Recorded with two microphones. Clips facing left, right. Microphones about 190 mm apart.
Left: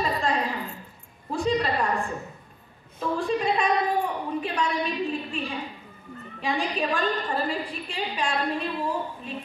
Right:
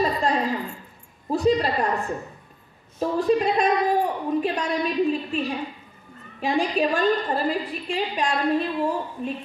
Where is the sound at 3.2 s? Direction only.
40° right (ahead or behind).